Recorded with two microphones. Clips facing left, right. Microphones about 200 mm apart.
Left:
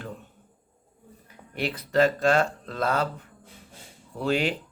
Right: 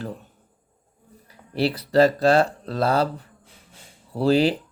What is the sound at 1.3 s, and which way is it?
Speech, 35° right (ahead or behind).